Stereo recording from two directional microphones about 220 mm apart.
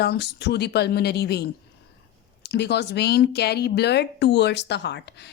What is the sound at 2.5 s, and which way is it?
Speech, 50° left (ahead or behind).